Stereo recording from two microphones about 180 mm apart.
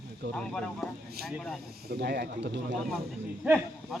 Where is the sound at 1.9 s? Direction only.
65° right (ahead or behind).